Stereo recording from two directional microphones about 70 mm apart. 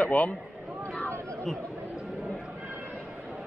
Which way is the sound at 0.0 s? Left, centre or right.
Left.